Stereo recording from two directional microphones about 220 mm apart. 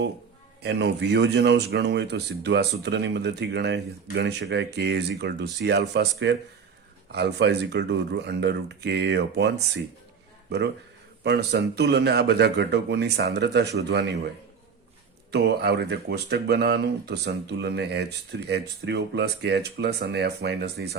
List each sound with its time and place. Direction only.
0.6 s speech: 50° right (ahead or behind)
11.2 s speech: 50° right (ahead or behind)
15.3 s speech: 50° right (ahead or behind)